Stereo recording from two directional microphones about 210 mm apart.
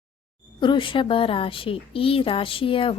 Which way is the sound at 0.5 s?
20° left (ahead or behind).